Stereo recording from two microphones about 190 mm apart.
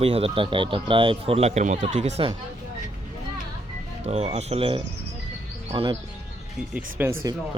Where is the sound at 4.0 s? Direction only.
35° right (ahead or behind).